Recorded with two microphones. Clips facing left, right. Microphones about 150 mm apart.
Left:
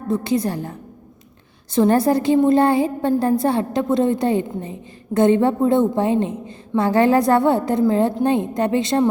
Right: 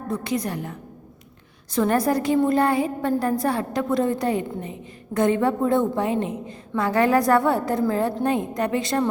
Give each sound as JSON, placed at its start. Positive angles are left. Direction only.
{"t": 0.1, "sound": "a woman's voice", "side_deg": 30}